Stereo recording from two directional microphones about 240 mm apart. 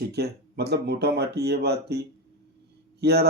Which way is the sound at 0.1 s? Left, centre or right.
Right.